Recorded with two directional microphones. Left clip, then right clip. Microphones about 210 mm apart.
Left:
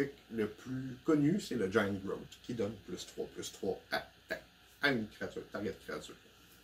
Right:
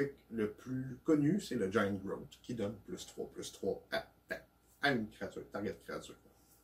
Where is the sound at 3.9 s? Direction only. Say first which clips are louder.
Left 1 dB; 15° left (ahead or behind).